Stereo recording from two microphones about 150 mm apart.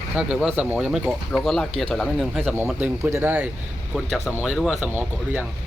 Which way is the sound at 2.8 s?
15° right (ahead or behind).